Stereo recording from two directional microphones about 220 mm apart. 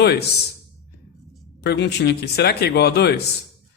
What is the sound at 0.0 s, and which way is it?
Speech, 45° left (ahead or behind).